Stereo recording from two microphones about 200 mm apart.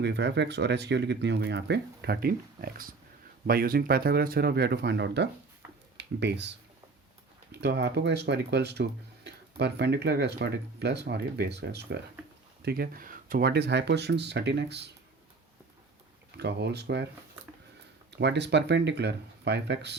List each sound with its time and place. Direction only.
0.0 s speech: 60° right (ahead or behind)
7.5 s speech: 55° right (ahead or behind)
16.4 s speech: 55° right (ahead or behind)
18.1 s speech: 60° right (ahead or behind)